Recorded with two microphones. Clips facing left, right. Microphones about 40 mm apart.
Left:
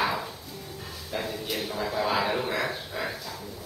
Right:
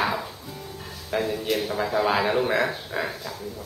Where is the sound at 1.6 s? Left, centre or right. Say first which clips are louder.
Right 3 dB; centre.